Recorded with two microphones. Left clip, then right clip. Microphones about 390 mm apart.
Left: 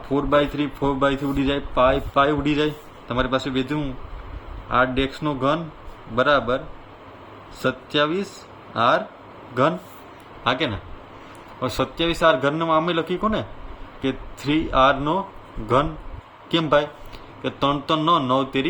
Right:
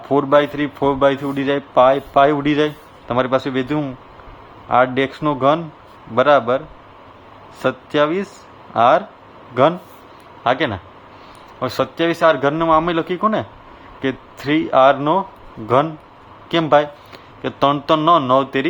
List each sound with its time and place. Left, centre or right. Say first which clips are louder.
0.1 s speech: right 6 dB; centre
7.6 s speech: right 4 dB; centre
10.4 s speech: right 5 dB; centre